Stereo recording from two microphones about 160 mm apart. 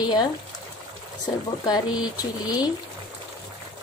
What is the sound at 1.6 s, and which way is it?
Speech, 25° left (ahead or behind).